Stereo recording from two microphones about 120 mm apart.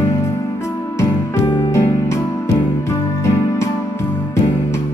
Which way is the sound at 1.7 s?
25° left (ahead or behind).